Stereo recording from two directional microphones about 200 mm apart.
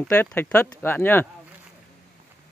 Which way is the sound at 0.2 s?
10° left (ahead or behind).